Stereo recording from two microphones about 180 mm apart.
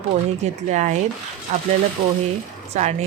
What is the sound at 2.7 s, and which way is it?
Speech, 40° right (ahead or behind).